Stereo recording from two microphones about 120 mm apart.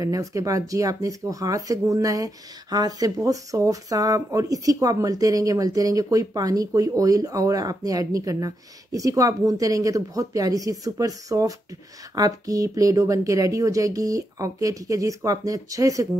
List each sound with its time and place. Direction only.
0.0 s speech: 30° right (ahead or behind)